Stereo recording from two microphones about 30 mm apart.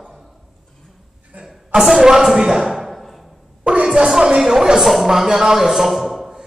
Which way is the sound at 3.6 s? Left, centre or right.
Right.